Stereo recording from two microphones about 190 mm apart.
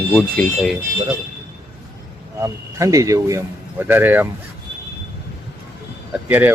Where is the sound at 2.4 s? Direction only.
15° right (ahead or behind).